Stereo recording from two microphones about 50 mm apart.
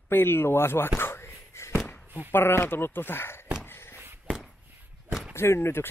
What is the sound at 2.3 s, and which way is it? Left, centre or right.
Speech, left.